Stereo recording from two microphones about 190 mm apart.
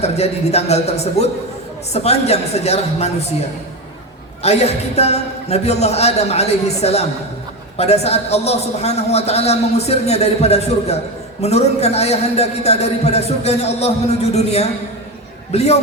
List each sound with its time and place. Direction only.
0.0 s a man's voice: 35° left (ahead or behind)
4.4 s a man's voice: 35° left (ahead or behind)